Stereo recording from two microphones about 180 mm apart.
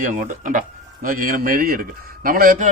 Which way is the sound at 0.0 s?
45° right (ahead or behind).